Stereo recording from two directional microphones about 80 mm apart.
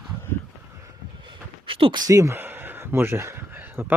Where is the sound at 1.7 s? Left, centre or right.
Right.